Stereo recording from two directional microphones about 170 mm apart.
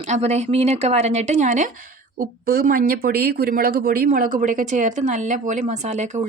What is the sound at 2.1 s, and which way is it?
A woman's voice, 60° right (ahead or behind).